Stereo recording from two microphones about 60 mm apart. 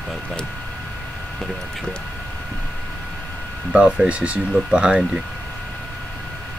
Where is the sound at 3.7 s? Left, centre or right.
Centre.